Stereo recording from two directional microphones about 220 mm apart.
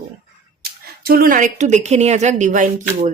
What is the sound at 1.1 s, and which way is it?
A woman's voice, 40° right (ahead or behind).